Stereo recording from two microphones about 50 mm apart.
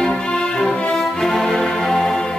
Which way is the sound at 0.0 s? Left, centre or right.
Centre.